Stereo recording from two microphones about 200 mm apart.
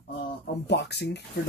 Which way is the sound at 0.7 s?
55° left (ahead or behind).